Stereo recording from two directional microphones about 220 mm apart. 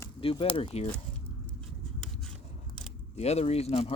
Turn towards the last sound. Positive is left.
turn(degrees=25)  # may be behind; listen again after turning